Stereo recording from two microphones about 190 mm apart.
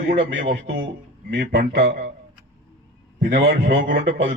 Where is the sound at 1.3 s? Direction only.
55° right (ahead or behind).